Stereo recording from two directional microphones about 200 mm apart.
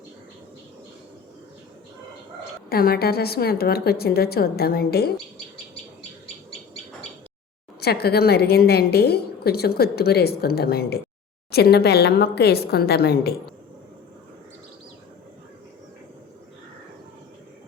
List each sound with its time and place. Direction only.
2.6 s a woman's voice: 50° left (ahead or behind)
7.8 s a woman's voice: 55° left (ahead or behind)